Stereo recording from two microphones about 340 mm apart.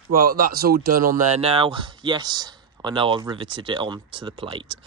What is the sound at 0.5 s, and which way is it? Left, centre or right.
Speech, right.